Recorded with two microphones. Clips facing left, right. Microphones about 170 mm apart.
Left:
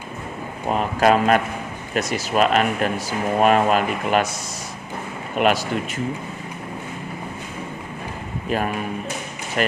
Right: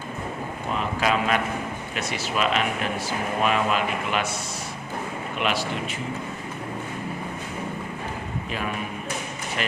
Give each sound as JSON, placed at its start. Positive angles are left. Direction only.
{"t": 0.7, "sound": "speech", "side_deg": 45}
{"t": 5.4, "sound": "speech", "side_deg": 45}
{"t": 8.4, "sound": "speech", "side_deg": 45}